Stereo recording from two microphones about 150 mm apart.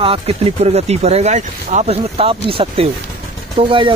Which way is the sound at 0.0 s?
40° right (ahead or behind).